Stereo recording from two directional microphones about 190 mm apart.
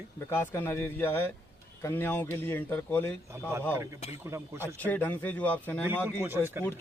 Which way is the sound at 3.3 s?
15° right (ahead or behind).